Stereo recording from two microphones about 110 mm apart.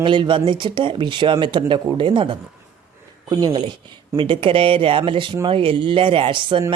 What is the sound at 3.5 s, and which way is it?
Speech, 45° right (ahead or behind).